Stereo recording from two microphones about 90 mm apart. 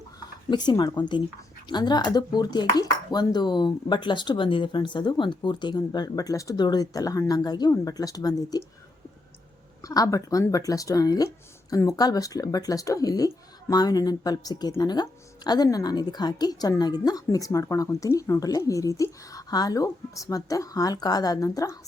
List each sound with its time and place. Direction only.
0.5 s speech: 55° left (ahead or behind)
9.8 s a woman's voice: 40° left (ahead or behind)